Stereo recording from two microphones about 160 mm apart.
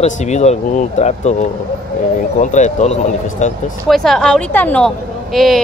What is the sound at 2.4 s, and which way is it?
Speech, 50° left (ahead or behind).